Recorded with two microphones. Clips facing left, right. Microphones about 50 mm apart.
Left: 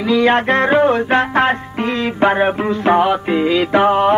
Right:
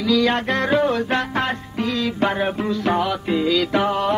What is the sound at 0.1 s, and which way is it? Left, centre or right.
Music, left.